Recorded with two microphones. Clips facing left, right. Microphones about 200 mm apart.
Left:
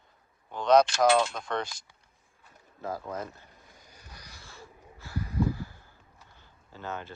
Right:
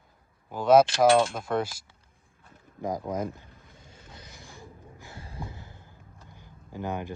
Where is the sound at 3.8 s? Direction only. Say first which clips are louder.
Right 4 dB; 25° right (ahead or behind).